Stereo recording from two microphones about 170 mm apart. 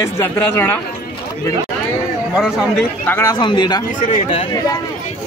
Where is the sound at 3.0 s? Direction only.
10° left (ahead or behind).